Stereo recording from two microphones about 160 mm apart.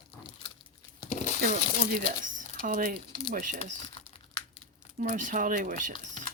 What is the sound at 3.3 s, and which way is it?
Speech, 55° right (ahead or behind).